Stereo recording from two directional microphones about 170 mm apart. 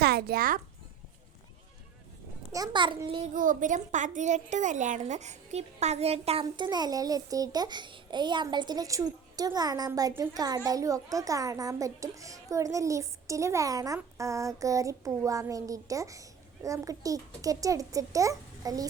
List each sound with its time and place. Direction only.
0.0 s a child's voice: 70° right (ahead or behind)
2.5 s a child's voice: 25° right (ahead or behind)
3.3 s a woman's voice: 50° right (ahead or behind)
6.4 s a child's voice: 25° right (ahead or behind)